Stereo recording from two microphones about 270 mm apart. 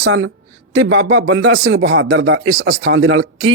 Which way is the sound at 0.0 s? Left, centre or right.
Right.